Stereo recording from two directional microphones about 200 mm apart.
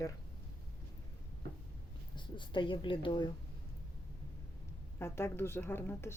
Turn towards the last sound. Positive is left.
turn(degrees=10)  # may be behind; listen again after turning